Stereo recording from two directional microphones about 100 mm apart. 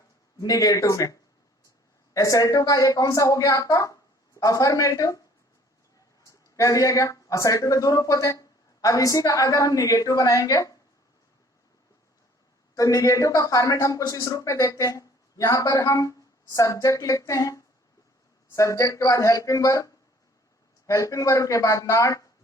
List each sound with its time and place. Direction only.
0.3 s speech: 40° left (ahead or behind)
2.1 s speech: 35° left (ahead or behind)
6.2 s speech: 35° left (ahead or behind)
12.7 s speech: 35° left (ahead or behind)